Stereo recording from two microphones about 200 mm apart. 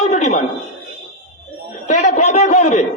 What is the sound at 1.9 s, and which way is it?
Speech, 35° left (ahead or behind).